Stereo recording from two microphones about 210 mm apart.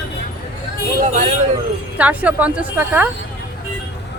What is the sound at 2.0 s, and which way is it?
A woman's voice, 5° right (ahead or behind).